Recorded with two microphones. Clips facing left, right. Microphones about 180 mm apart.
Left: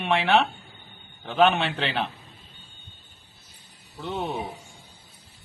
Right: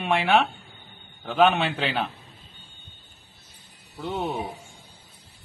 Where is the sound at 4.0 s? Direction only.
10° right (ahead or behind).